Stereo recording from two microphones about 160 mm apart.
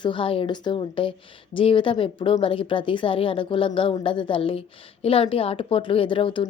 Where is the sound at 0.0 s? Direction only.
30° left (ahead or behind).